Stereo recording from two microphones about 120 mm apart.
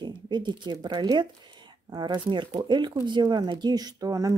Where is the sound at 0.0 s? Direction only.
40° right (ahead or behind).